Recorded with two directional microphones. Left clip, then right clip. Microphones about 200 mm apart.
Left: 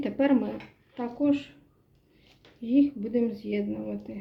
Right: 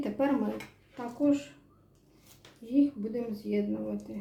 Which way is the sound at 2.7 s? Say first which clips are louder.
Left 4 dB; 35° left (ahead or behind).